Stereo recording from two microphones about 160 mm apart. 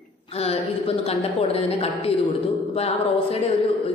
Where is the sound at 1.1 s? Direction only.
40° left (ahead or behind).